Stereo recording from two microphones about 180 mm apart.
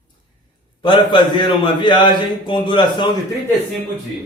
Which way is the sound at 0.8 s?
25° left (ahead or behind).